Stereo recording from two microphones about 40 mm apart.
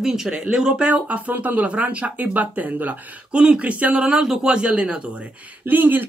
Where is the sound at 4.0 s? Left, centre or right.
Centre.